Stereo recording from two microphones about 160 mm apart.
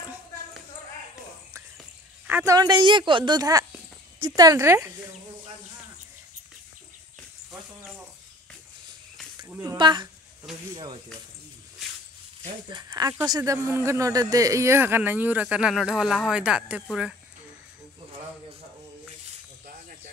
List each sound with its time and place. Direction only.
2.2 s a sound: 10° right (ahead or behind)
2.5 s a woman's voice: 25° right (ahead or behind)
9.5 s speech: 15° right (ahead or behind)
9.8 s a woman's voice: 30° right (ahead or behind)
12.6 s speech: 25° right (ahead or behind); by 16.8 s 5° right (ahead or behind)